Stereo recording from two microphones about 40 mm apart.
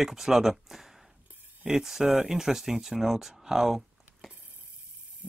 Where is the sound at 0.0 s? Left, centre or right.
Centre.